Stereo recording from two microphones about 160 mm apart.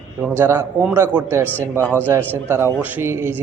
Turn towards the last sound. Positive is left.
turn(degrees=-15)  # may be behind; listen again after turning